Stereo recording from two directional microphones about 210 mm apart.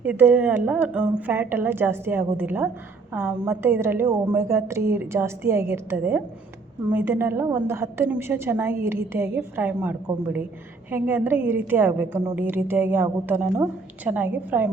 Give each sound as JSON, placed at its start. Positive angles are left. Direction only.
{"t": 0.0, "sound": "a woman's voice", "side_deg": -10}